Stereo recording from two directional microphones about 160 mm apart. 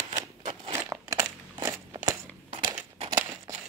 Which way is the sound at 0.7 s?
20° right (ahead or behind).